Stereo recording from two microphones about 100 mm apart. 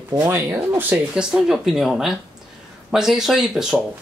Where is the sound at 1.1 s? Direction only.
5° right (ahead or behind).